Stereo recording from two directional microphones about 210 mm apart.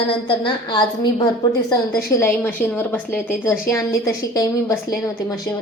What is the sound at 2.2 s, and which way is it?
A woman's voice, 10° left (ahead or behind).